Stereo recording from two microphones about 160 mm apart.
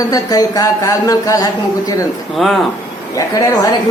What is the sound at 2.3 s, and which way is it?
Speech, centre (ahead or behind).